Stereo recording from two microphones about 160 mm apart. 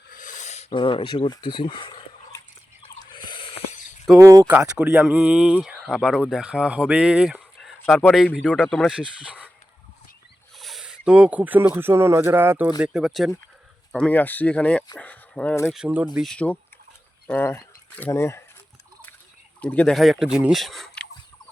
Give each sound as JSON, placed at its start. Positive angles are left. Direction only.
{"t": 0.1, "sound": "a sound", "side_deg": 55}
{"t": 0.7, "sound": "speech", "side_deg": 30}
{"t": 3.0, "sound": "a sound", "side_deg": 30}
{"t": 4.2, "sound": "speech", "side_deg": -15}
{"t": 10.6, "sound": "speech", "side_deg": 0}
{"t": 13.9, "sound": "speech", "side_deg": 10}
{"t": 15.7, "sound": "speech", "side_deg": -5}
{"t": 16.1, "sound": "speech", "side_deg": 5}
{"t": 19.6, "sound": "speech", "side_deg": 5}